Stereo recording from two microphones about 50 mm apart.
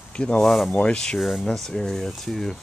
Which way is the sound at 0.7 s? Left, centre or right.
Centre.